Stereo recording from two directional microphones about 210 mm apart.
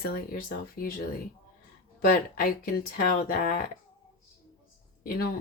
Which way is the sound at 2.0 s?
45° left (ahead or behind).